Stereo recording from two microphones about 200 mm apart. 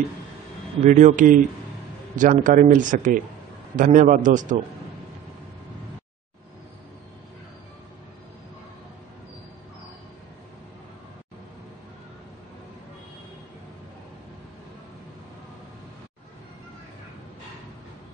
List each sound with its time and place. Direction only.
0.8 s speech: 40° right (ahead or behind)